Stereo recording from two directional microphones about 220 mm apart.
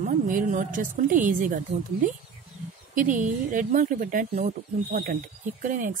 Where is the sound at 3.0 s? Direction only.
35° right (ahead or behind).